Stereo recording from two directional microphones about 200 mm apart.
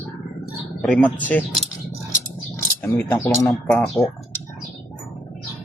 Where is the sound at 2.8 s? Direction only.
10° left (ahead or behind).